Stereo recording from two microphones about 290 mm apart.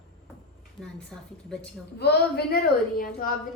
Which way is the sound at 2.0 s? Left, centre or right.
Left.